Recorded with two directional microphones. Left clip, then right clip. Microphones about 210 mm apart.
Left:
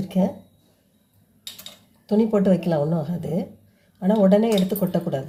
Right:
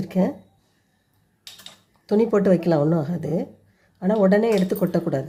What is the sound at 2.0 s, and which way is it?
Speech, 30° right (ahead or behind).